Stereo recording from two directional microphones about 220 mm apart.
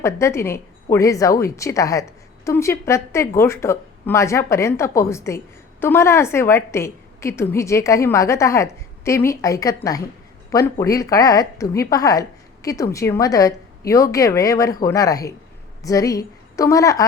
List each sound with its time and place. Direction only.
0.0 s a woman's voice: 10° left (ahead or behind)